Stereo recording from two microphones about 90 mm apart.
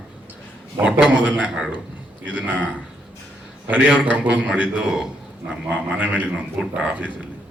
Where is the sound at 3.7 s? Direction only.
15° right (ahead or behind).